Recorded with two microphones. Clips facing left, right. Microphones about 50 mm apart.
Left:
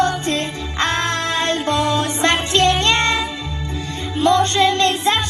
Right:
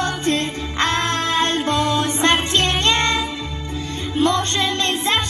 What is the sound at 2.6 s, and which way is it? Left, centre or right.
Music, right.